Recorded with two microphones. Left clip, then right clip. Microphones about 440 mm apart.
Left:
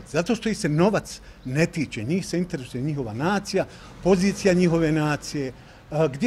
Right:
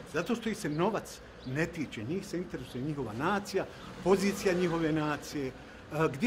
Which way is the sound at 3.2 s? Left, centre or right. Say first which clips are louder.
Left 7 dB; left.